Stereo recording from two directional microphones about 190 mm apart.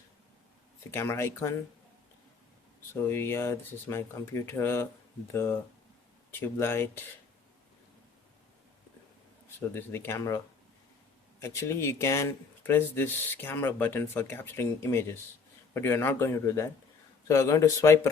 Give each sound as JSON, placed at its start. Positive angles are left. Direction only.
{"t": 0.9, "sound": "speech", "side_deg": 15}
{"t": 2.9, "sound": "speech", "side_deg": 10}
{"t": 9.6, "sound": "speech", "side_deg": 10}